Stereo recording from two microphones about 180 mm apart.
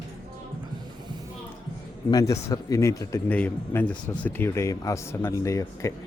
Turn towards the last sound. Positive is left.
turn(degrees=15)  # may be behind; listen again after turning